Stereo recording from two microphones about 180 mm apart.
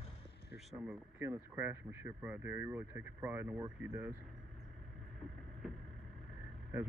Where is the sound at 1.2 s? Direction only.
15° right (ahead or behind).